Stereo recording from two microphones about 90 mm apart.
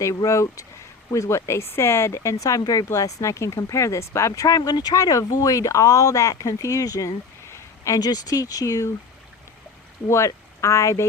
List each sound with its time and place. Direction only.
0.0 s speech: 35° left (ahead or behind)
10.1 s speech: 35° left (ahead or behind)